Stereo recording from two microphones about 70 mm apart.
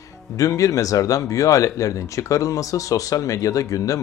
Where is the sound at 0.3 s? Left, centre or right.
Left.